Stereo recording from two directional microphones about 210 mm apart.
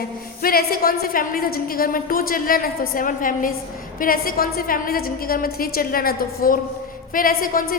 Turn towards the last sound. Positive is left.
turn(degrees=40)  # may be behind; listen again after turning